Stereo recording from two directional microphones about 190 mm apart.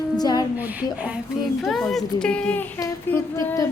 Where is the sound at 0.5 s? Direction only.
10° right (ahead or behind).